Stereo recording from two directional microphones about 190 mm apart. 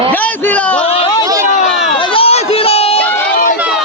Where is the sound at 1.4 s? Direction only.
35° left (ahead or behind).